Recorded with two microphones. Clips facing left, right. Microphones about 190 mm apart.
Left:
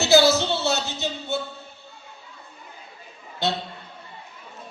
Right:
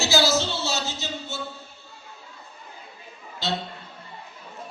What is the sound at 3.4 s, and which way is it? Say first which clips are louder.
Speech: left 3 dB; 60° left (ahead or behind).